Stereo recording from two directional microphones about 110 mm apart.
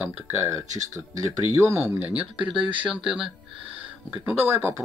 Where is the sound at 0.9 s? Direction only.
30° right (ahead or behind); by 2.5 s 15° right (ahead or behind).